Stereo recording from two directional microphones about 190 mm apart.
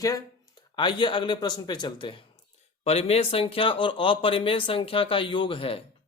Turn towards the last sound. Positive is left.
turn(degrees=30)  # may be behind; listen again after turning